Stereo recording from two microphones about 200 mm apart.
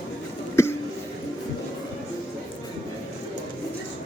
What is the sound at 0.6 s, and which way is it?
Cough, 15° left (ahead or behind).